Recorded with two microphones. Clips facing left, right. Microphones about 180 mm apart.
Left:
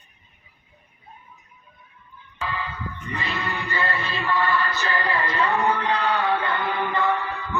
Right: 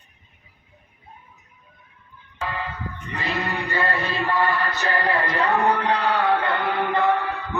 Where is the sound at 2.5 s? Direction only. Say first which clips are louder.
Even; 55° right (ahead or behind).